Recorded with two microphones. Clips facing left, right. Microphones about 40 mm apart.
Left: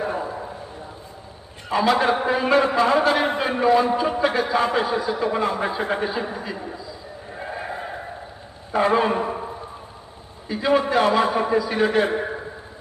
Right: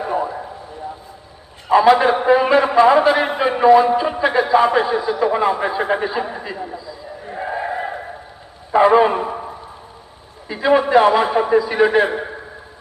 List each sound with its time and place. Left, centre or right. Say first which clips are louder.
1.6 s a man's voice: right 7 dB; centre
7.3 s a sound: right 7 dB; centre
8.7 s a man's voice: right 7 dB; centre
10.5 s a man's voice: right 6 dB; centre